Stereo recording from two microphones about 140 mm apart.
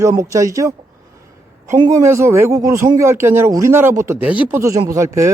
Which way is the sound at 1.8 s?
20° right (ahead or behind).